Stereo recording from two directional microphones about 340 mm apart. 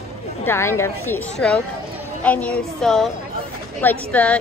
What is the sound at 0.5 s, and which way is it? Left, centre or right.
A woman's voice, centre.